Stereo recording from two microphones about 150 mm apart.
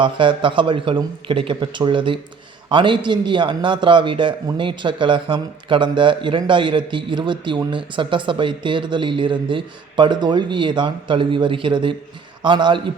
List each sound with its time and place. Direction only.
0.0 s a man's voice: 35° right (ahead or behind)